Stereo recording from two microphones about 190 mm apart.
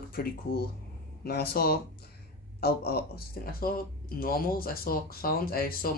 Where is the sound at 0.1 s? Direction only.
55° left (ahead or behind).